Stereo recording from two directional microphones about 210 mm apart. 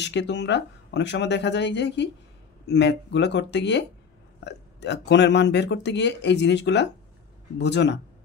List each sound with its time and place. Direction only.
0.0 s speech: 55° left (ahead or behind)